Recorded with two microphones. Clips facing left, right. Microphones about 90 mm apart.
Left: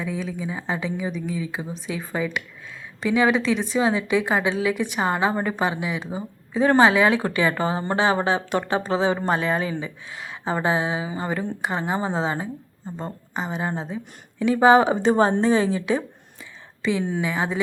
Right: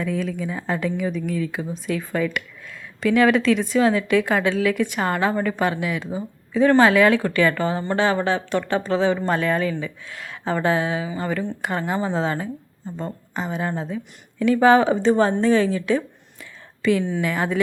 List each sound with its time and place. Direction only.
0.0 s a woman's voice: 10° left (ahead or behind)
3.3 s speech: centre (ahead or behind)
3.8 s a woman's voice: 15° left (ahead or behind)
6.5 s speech: 30° left (ahead or behind)
13.3 s speech: 5° left (ahead or behind)
13.6 s a woman's voice: 20° left (ahead or behind)
17.2 s a woman's voice: 10° left (ahead or behind)